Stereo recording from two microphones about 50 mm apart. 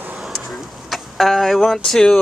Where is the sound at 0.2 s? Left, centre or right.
Centre.